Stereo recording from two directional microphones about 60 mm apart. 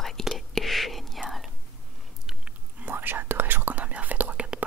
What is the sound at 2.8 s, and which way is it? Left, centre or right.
Whispering, right.